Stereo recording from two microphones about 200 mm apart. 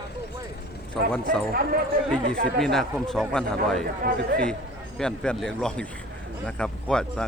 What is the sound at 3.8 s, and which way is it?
Speech, 50° right (ahead or behind).